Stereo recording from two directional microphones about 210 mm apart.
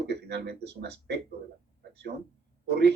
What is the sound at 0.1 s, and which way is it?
Speech, 50° right (ahead or behind).